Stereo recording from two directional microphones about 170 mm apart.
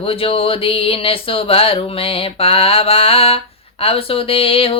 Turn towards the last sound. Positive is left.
turn(degrees=35)  # may be behind; listen again after turning